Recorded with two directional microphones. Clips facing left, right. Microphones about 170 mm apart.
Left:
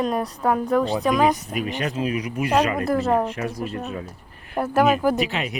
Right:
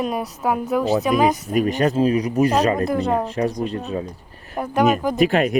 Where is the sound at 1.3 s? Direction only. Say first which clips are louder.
Right 7 dB; 45° right (ahead or behind).